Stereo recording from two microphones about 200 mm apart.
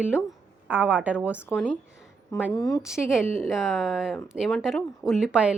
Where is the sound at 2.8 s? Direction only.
5° right (ahead or behind).